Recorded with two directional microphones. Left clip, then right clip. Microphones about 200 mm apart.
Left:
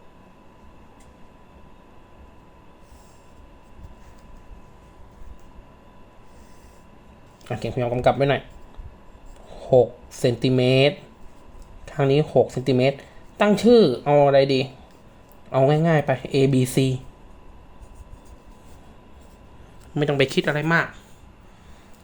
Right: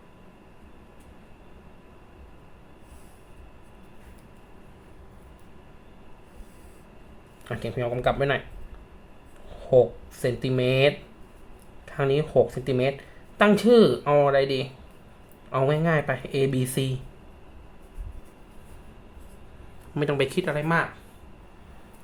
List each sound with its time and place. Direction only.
7.4 s speech: 25° left (ahead or behind)
9.6 s speech: 25° left (ahead or behind)
19.9 s speech: 20° left (ahead or behind)